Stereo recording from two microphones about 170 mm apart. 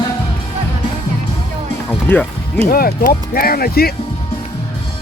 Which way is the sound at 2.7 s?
60° left (ahead or behind).